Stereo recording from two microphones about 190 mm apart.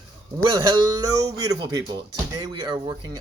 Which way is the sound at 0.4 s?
20° right (ahead or behind).